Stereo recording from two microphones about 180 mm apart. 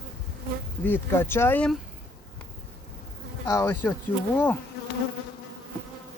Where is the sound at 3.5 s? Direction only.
10° left (ahead or behind).